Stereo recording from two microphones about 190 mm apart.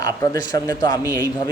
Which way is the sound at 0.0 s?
20° left (ahead or behind).